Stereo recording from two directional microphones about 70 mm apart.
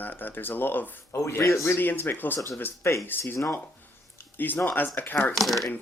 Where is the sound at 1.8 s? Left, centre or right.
Left.